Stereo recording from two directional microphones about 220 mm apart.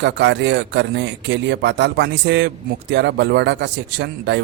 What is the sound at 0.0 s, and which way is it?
Speech, 55° right (ahead or behind).